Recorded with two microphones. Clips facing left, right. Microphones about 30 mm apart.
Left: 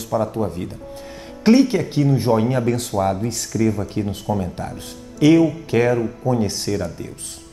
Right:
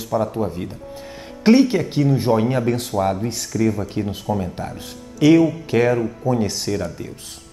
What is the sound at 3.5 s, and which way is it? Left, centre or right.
Speech, centre.